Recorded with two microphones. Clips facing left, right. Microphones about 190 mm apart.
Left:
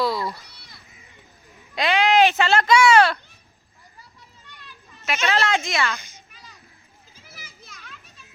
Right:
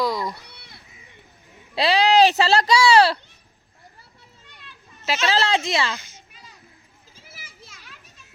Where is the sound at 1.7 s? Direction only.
35° right (ahead or behind).